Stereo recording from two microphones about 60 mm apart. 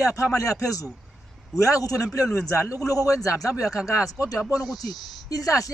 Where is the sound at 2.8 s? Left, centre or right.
Left.